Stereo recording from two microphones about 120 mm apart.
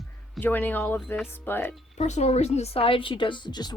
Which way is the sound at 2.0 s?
65° left (ahead or behind).